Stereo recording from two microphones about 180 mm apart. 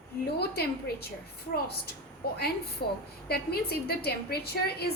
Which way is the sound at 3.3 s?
60° left (ahead or behind).